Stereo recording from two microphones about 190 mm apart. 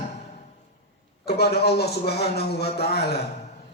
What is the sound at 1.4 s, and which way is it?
A man's voice, 60° left (ahead or behind).